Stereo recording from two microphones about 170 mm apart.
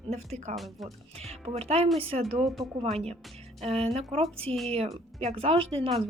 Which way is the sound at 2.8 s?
35° right (ahead or behind).